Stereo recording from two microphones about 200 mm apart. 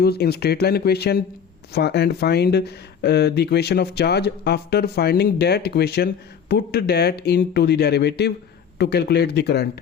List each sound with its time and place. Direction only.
0.0 s speech: 55° left (ahead or behind)